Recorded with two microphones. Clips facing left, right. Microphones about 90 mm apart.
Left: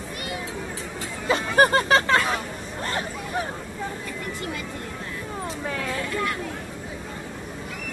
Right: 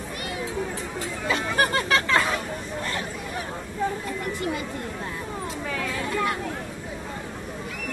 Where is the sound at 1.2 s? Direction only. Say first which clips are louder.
Left 5 dB; 35° left (ahead or behind).